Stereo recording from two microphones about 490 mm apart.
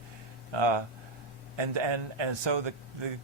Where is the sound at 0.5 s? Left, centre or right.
Right.